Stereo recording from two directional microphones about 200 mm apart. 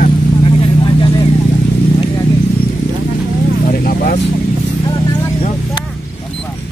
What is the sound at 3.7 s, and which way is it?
Vehicle, 45° left (ahead or behind).